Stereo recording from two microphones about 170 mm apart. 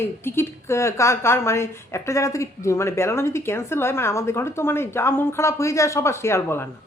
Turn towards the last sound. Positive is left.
turn(degrees=15)  # may be behind; listen again after turning